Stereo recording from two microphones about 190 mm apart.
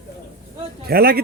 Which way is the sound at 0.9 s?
50° right (ahead or behind).